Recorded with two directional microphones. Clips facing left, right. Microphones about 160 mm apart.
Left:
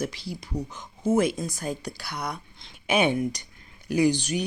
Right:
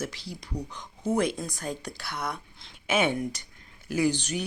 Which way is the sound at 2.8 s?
15° left (ahead or behind).